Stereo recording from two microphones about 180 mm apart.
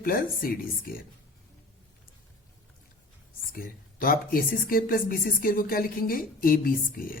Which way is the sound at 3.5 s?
50° left (ahead or behind).